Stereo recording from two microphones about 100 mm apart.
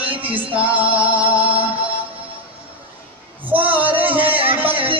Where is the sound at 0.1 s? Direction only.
65° right (ahead or behind).